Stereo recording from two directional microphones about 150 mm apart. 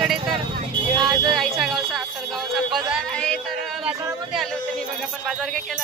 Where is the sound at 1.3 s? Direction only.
Centre (ahead or behind).